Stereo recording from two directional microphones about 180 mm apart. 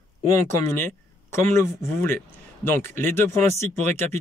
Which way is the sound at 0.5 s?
15° left (ahead or behind).